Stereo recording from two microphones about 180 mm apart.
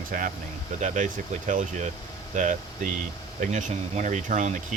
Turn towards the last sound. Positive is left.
turn(degrees=-45)  # may be behind; listen again after turning